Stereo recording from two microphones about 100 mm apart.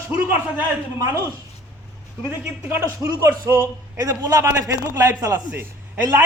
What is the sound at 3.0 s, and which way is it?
A man's voice, 30° right (ahead or behind).